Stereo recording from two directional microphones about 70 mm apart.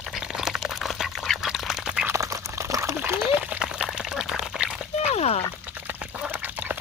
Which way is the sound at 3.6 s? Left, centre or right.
Centre.